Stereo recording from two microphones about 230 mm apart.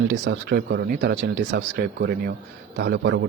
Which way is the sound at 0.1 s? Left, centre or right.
Right.